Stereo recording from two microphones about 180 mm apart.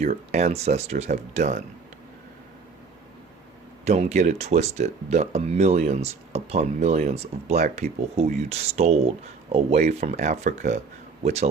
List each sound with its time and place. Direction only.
0.0 s speech: 40° right (ahead or behind)
3.8 s speech: 40° right (ahead or behind)